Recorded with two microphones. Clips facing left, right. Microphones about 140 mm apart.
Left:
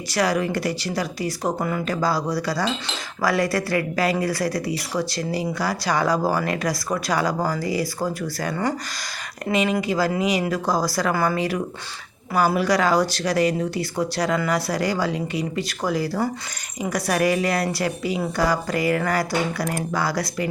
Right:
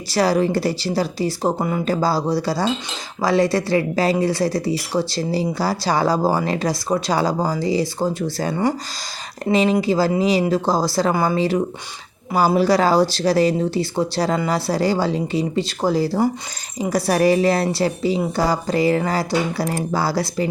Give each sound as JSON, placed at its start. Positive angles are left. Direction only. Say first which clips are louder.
{"t": 0.1, "sound": "speech", "louder": "right 4 dB", "side_deg": -30}